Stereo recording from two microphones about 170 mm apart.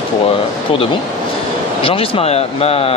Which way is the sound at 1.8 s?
30° left (ahead or behind).